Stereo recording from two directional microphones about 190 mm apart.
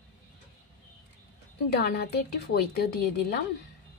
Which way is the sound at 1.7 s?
55° left (ahead or behind).